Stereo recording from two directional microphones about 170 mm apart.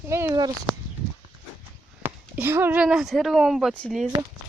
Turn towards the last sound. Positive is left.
turn(degrees=5)  # may be behind; listen again after turning